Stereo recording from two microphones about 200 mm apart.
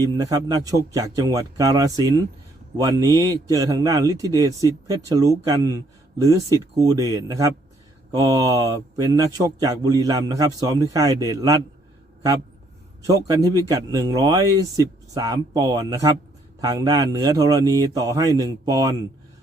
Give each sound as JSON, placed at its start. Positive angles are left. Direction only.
{"t": 0.0, "sound": "speech", "side_deg": -20}
{"t": 13.2, "sound": "speech", "side_deg": -20}